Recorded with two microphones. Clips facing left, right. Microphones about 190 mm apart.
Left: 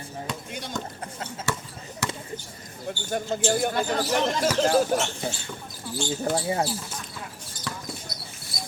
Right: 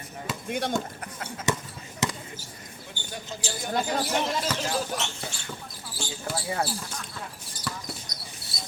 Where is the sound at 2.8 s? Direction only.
55° left (ahead or behind).